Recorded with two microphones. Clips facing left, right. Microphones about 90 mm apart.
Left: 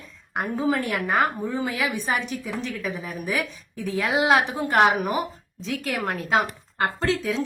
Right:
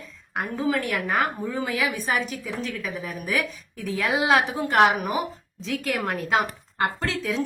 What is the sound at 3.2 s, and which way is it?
Speech, 20° left (ahead or behind).